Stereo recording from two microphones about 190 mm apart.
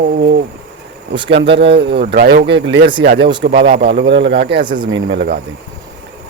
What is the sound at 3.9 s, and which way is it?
Speech, 65° right (ahead or behind).